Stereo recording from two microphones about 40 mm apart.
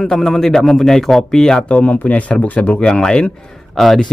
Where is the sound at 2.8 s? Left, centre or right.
Centre.